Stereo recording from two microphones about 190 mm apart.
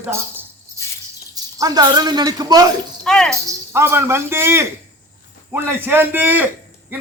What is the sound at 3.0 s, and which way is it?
Speech, 5° left (ahead or behind).